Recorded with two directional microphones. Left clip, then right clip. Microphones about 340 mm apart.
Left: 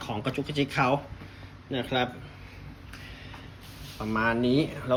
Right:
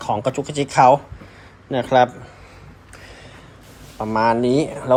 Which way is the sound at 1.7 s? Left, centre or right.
Right.